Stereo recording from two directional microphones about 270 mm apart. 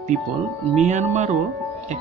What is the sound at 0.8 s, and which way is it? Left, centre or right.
Speech, right.